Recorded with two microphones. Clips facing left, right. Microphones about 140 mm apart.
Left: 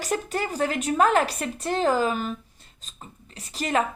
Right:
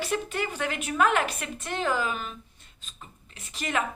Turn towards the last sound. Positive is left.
turn(degrees=35)  # may be behind; listen again after turning